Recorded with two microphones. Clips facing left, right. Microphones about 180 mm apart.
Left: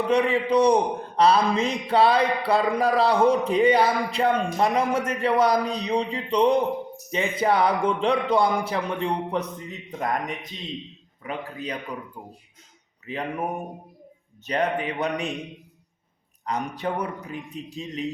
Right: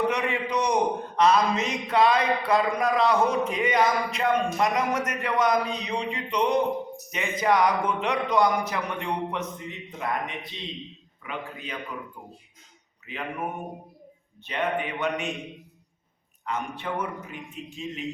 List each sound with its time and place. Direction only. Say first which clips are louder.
0.1 s a man's voice: left 6 dB; 30° left (ahead or behind)
10.0 s a man's voice: left 3 dB; 45° left (ahead or behind)
13.1 s a man's voice: left 5 dB; 35° left (ahead or behind)
14.4 s a man's voice: left 3 dB; 40° left (ahead or behind)
16.5 s a man's voice: left 3 dB; 40° left (ahead or behind)